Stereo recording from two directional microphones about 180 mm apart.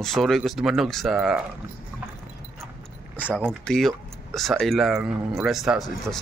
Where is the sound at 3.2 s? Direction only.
10° left (ahead or behind).